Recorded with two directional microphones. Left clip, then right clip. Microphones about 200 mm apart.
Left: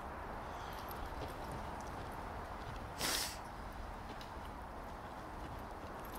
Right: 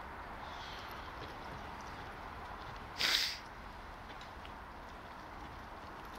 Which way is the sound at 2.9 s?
25° left (ahead or behind).